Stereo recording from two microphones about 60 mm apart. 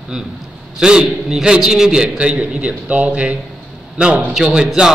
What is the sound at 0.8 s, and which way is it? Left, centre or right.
A man's voice, centre.